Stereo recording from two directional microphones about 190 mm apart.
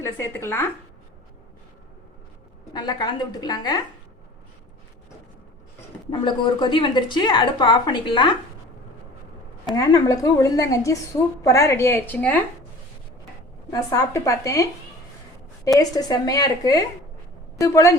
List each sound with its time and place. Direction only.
0.0 s a woman's voice: 15° left (ahead or behind)
2.7 s speech: 20° left (ahead or behind)
6.1 s speech: 25° left (ahead or behind)
9.7 s a woman's voice: 15° left (ahead or behind)
13.7 s a woman's voice: 15° left (ahead or behind)
15.8 s a woman's voice: 20° left (ahead or behind)